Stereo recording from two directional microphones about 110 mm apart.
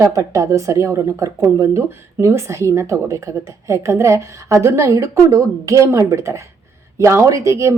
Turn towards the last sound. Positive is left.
turn(degrees=-25)  # may be behind; listen again after turning